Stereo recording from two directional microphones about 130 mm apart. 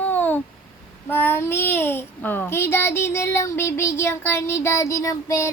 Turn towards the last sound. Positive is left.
turn(degrees=25)  # may be behind; listen again after turning